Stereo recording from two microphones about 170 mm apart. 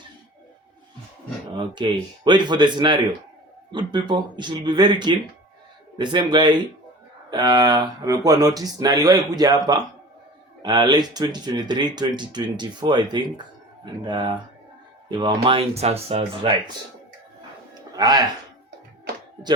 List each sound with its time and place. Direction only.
1.5 s speech: 25° right (ahead or behind)
17.9 s speech: 25° right (ahead or behind)